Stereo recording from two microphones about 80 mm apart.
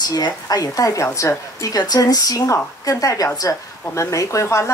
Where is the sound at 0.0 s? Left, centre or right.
Left.